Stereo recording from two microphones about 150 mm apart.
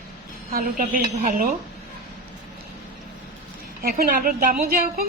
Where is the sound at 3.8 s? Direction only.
75° right (ahead or behind).